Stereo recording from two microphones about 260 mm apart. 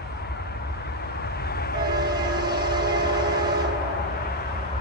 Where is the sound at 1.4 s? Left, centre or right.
Left.